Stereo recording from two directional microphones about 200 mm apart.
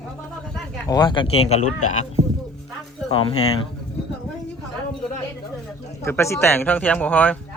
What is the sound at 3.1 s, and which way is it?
Speech, 25° left (ahead or behind).